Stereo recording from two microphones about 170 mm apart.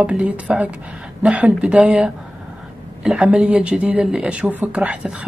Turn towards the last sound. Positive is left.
turn(degrees=-10)  # may be behind; listen again after turning